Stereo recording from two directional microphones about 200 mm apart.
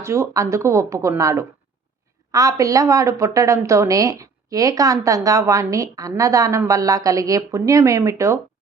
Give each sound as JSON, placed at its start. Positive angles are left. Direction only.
{"t": 0.0, "sound": "a woman's voice", "side_deg": -15}